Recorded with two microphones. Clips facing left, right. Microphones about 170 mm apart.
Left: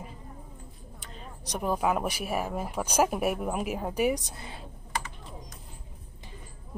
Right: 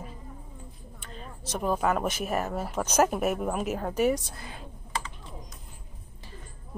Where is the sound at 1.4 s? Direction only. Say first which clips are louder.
Right 1 dB; 15° left (ahead or behind).